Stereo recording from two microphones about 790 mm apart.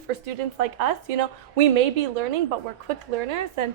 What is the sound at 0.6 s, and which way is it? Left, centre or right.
A woman's voice, right.